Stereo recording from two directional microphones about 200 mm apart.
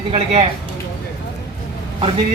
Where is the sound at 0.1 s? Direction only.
30° right (ahead or behind).